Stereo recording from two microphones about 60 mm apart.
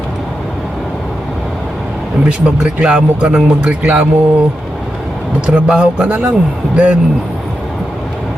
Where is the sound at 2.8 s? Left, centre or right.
Centre.